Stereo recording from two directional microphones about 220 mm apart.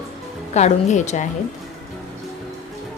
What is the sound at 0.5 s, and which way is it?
Speech, 30° left (ahead or behind).